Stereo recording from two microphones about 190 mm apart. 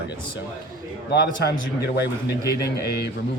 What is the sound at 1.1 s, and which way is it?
Speech, 60° left (ahead or behind).